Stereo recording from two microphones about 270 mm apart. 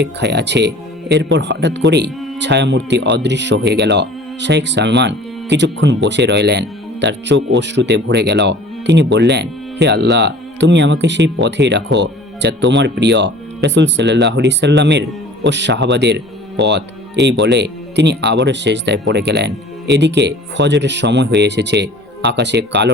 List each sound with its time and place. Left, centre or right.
0.0 s speech: right